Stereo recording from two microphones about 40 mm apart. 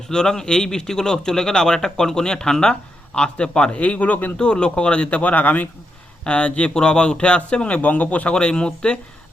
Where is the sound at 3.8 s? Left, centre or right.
Left.